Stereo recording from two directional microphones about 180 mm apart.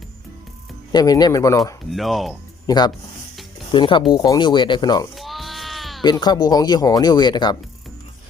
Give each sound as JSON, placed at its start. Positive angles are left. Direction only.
{"t": 0.9, "sound": "speech", "side_deg": 20}
{"t": 1.9, "sound": "speech", "side_deg": 0}
{"t": 2.6, "sound": "speech", "side_deg": 20}
{"t": 5.1, "sound": "sheep", "side_deg": 0}
{"t": 6.0, "sound": "speech", "side_deg": 25}